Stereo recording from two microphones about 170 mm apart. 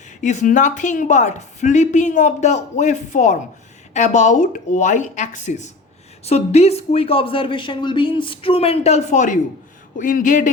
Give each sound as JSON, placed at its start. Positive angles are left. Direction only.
{"t": 0.2, "sound": "a woman's voice", "side_deg": 45}